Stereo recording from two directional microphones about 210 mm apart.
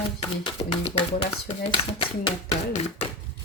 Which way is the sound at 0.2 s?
25° left (ahead or behind).